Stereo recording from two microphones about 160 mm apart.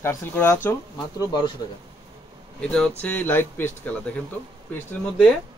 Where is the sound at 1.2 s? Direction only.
25° left (ahead or behind).